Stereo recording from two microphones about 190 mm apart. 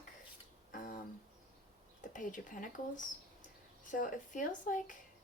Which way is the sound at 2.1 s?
45° left (ahead or behind).